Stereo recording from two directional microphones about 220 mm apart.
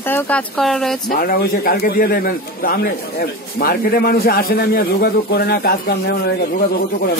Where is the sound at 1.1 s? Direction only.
40° left (ahead or behind).